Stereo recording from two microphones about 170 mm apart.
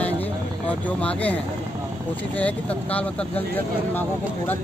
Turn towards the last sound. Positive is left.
turn(degrees=10)  # may be behind; listen again after turning